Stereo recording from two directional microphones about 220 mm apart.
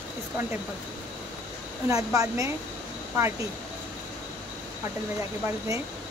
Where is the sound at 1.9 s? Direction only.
15° right (ahead or behind).